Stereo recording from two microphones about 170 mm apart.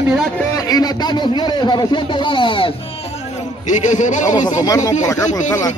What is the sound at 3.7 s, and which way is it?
Speech, 45° left (ahead or behind).